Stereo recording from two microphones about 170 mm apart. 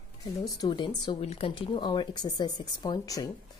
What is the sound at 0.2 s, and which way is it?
A woman's voice, 25° left (ahead or behind).